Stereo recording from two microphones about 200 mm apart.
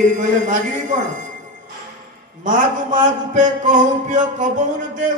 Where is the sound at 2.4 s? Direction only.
40° right (ahead or behind).